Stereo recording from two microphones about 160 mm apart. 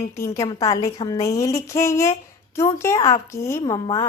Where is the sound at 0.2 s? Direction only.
20° left (ahead or behind).